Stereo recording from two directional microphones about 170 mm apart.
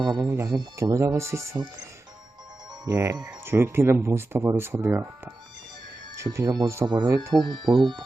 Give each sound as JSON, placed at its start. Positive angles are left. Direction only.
{"t": 0.0, "sound": "speech", "side_deg": -20}
{"t": 2.8, "sound": "speech", "side_deg": -15}